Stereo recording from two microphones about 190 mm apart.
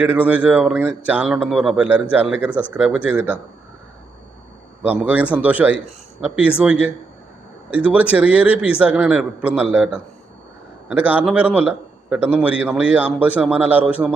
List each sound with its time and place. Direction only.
0.0 s speech: 10° right (ahead or behind)
4.9 s speech: 10° right (ahead or behind)